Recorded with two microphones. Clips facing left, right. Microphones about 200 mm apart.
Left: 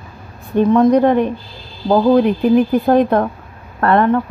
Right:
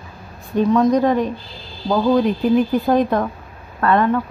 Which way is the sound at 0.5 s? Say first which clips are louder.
Left 4 dB; 55° left (ahead or behind).